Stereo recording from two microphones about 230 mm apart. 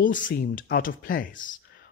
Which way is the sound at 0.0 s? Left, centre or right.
Left.